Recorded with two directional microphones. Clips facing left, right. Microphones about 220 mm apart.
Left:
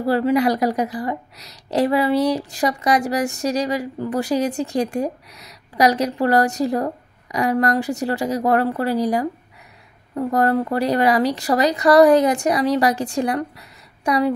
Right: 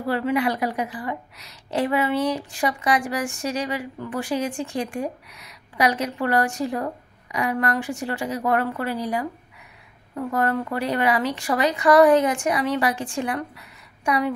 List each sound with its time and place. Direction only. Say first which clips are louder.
0.0 s a woman's voice: left 5 dB; 35° left (ahead or behind)